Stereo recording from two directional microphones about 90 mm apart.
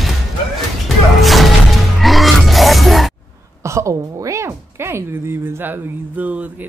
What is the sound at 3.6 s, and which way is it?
Speech, 35° right (ahead or behind).